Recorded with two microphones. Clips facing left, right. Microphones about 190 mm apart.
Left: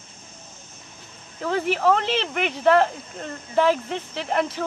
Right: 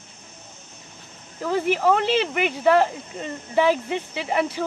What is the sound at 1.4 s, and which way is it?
Speech, 5° right (ahead or behind).